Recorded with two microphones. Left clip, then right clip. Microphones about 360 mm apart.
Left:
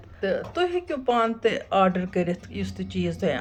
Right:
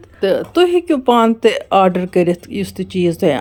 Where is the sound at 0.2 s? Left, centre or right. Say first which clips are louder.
Right 11 dB; centre.